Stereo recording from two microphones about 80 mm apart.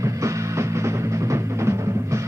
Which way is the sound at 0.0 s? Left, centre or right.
Right.